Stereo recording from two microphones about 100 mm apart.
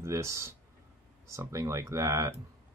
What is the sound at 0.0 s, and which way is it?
Speech, 30° right (ahead or behind).